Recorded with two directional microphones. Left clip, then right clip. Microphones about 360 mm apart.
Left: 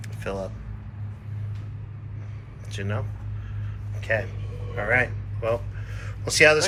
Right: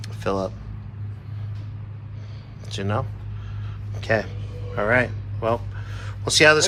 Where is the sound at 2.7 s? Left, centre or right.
Centre.